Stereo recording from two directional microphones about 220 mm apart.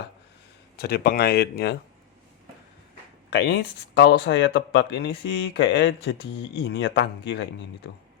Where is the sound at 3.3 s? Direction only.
50° left (ahead or behind).